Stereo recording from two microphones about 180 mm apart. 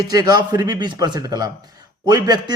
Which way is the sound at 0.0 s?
20° right (ahead or behind).